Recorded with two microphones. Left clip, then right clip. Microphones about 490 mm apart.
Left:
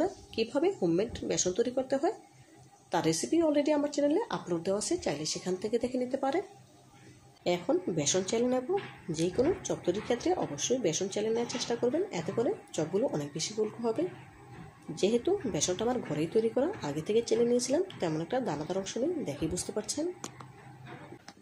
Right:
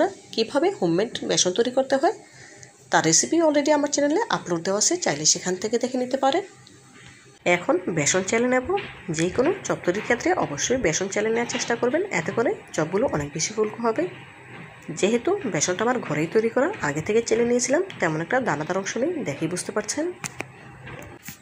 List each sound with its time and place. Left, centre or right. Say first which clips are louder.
0.0 s a woman's voice: right 8 dB; right
7.6 s speech: right 7 dB; right
15.2 s speech: right 7 dB; right